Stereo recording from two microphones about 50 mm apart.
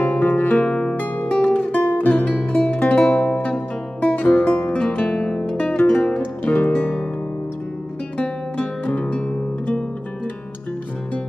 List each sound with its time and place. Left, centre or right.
0.0 s music: left
0.7 s music: centre
0.9 s music: left
4.6 s music: left
6.4 s music: left
8.5 s music: left